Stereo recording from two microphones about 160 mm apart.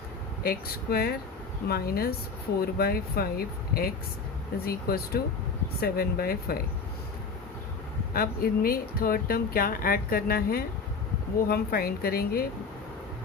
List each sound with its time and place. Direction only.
0.4 s speech: 75° left (ahead or behind)
8.1 s speech: 70° left (ahead or behind)